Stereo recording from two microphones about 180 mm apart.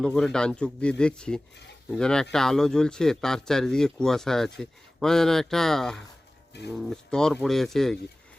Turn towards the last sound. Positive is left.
turn(degrees=0)  # may be behind; listen again after turning